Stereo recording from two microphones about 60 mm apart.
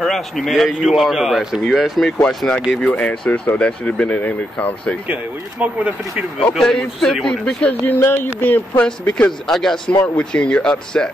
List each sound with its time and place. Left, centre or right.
0.0 s a man's voice: centre
2.2 s speech: centre
5.0 s speech: right
6.6 s speech: centre
7.2 s speech: centre
8.0 s speech: left
8.4 s speech: left
9.5 s speech: centre
9.8 s speech: centre